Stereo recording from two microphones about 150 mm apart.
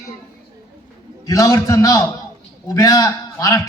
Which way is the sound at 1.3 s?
20° left (ahead or behind).